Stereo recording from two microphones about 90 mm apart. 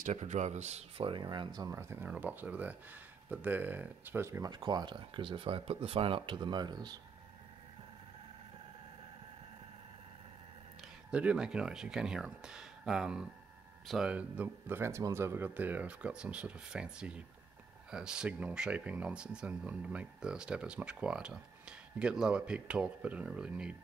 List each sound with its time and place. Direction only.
0.9 s speech: 75° right (ahead or behind)
1.2 s speech: 55° right (ahead or behind)
1.7 s speech: 30° right (ahead or behind)
2.0 s speech: 20° right (ahead or behind)
4.4 s speech: 55° right (ahead or behind)
11.1 s speech: 15° right (ahead or behind)